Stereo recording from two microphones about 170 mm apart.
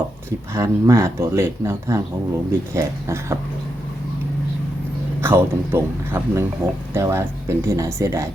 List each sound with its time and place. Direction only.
0.5 s speech: 15° right (ahead or behind)
5.2 s speech: 15° right (ahead or behind)